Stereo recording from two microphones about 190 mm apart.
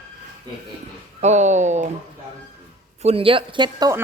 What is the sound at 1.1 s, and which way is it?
Speech, 35° right (ahead or behind).